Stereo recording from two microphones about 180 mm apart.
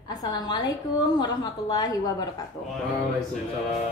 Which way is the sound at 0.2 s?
20° left (ahead or behind).